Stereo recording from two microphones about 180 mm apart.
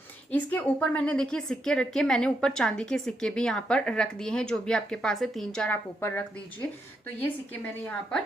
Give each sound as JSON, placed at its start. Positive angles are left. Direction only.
{"t": 0.3, "sound": "a woman's voice", "side_deg": 10}